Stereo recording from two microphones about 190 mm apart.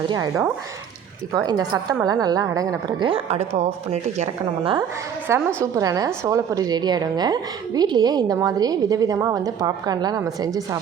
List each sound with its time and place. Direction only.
0.1 s a woman's voice: 15° right (ahead or behind)
3.2 s a woman's voice: 35° right (ahead or behind)
5.3 s a woman's voice: 15° right (ahead or behind)